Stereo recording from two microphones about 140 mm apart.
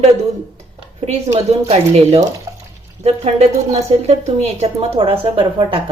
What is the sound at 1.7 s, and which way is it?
A woman's voice, 50° right (ahead or behind).